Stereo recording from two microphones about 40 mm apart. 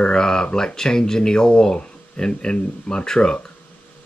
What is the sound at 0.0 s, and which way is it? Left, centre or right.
Speech, left.